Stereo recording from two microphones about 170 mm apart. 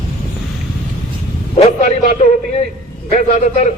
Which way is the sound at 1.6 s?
40° left (ahead or behind).